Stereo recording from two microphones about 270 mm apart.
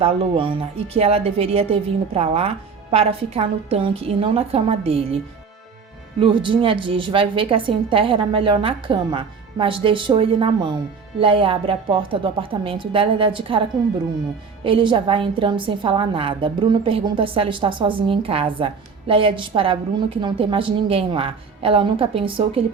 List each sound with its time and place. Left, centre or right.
0.0 s a woman's voice: right
6.1 s a woman's voice: centre